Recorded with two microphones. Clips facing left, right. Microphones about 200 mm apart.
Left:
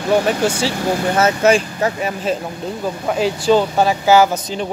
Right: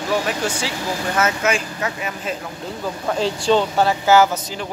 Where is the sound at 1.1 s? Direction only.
30° left (ahead or behind).